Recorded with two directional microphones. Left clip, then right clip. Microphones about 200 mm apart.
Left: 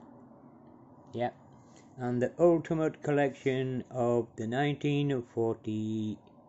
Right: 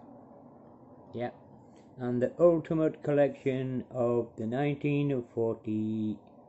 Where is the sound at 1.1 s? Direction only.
15° left (ahead or behind).